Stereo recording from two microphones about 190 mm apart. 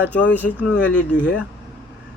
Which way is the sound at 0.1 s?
5° left (ahead or behind).